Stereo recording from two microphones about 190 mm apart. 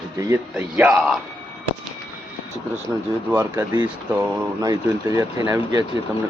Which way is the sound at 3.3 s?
10° right (ahead or behind).